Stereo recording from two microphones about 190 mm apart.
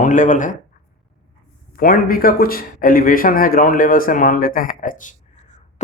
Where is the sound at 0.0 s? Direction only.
45° left (ahead or behind).